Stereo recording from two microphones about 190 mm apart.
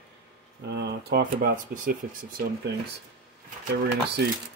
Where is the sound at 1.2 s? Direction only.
45° right (ahead or behind).